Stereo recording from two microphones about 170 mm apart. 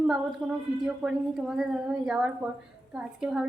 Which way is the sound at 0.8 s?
Centre (ahead or behind).